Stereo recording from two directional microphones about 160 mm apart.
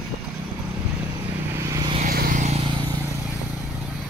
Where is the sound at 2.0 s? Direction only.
65° right (ahead or behind).